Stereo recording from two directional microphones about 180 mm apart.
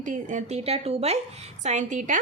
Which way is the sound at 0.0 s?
45° right (ahead or behind).